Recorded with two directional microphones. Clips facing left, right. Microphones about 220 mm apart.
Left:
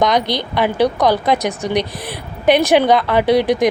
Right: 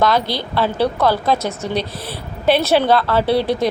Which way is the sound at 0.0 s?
15° left (ahead or behind).